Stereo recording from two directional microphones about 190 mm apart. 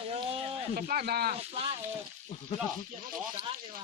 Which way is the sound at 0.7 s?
50° right (ahead or behind).